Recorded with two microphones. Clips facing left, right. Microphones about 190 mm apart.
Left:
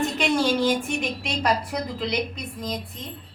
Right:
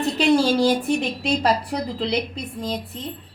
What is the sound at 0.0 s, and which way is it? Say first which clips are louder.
A woman's voice: right 4 dB; 35° right (ahead or behind).